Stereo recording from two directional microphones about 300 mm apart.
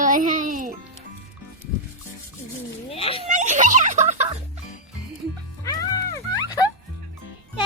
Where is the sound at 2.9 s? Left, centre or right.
Centre.